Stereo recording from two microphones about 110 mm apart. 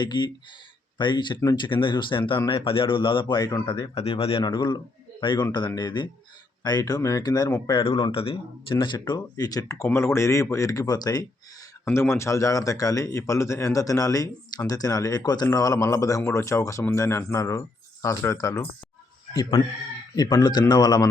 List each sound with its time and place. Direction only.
0.0 s speech: 40° left (ahead or behind)
3.3 s speech: 35° left (ahead or behind)
3.7 s speech: 60° left (ahead or behind)
4.4 s speech: 40° left (ahead or behind)
7.7 s speech: 50° left (ahead or behind); by 11.3 s 35° left (ahead or behind)
11.9 s speech: 25° left (ahead or behind)